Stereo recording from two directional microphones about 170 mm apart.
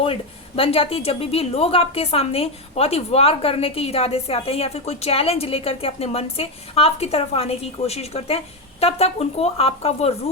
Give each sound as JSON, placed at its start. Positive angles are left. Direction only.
{"t": 0.0, "sound": "speech", "side_deg": 35}